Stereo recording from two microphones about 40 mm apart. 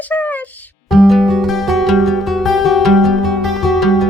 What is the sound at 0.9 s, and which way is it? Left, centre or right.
Music, centre.